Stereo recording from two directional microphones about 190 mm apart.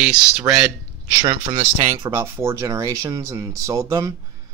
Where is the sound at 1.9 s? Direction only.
15° right (ahead or behind).